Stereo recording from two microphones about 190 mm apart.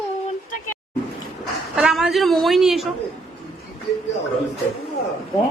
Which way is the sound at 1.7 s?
5° right (ahead or behind).